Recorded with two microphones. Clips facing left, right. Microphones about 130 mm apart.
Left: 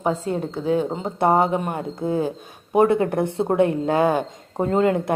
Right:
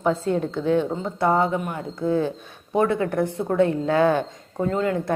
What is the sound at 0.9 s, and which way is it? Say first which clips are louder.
Speech: left 2 dB; 25° left (ahead or behind).